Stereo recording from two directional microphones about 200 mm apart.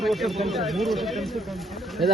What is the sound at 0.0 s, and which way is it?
Speech, centre (ahead or behind).